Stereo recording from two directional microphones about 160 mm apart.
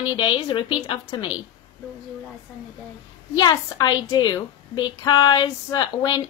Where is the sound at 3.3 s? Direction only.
25° left (ahead or behind).